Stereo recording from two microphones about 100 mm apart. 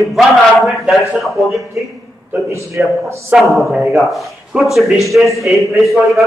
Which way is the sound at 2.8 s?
20° right (ahead or behind).